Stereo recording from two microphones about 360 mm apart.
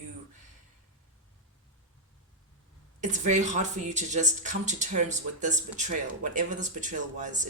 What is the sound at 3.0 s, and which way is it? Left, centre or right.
Speech, centre.